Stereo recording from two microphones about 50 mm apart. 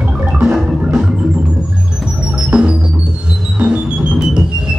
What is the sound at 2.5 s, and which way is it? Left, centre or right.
Music, centre.